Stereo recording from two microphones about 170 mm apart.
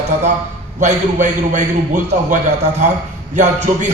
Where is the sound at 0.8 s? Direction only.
45° right (ahead or behind).